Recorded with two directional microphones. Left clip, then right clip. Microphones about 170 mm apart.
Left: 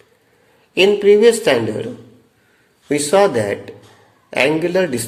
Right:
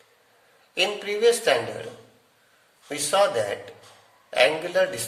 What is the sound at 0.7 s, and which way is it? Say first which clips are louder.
Speech: left 14 dB; 25° left (ahead or behind).